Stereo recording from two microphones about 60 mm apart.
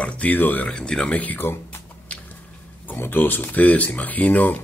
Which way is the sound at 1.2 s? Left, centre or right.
Left.